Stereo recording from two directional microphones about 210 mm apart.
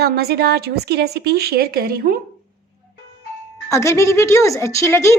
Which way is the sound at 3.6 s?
15° left (ahead or behind).